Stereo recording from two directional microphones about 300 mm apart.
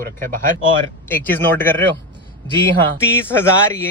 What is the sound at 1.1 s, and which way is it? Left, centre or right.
Speech, centre.